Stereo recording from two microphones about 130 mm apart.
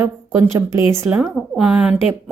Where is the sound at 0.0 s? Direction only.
20° right (ahead or behind).